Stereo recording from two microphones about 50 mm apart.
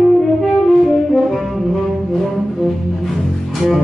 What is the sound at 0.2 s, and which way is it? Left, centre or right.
Saxophone, centre.